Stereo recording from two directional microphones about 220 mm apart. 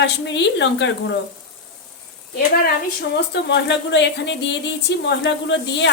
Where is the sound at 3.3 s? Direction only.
50° left (ahead or behind).